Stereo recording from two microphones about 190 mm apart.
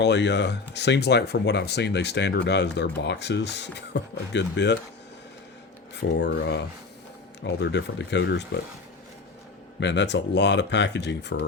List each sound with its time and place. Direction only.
0.0 s speech: 65° left (ahead or behind)
6.0 s speech: 65° left (ahead or behind)
9.8 s speech: 65° left (ahead or behind)